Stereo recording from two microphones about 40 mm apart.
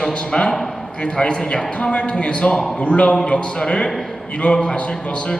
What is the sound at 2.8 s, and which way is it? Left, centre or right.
A man's voice, left.